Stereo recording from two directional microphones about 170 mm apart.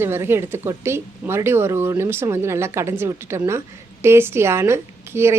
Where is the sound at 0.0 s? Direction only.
15° right (ahead or behind).